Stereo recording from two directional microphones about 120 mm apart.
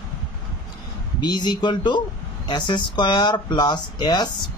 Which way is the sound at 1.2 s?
35° left (ahead or behind).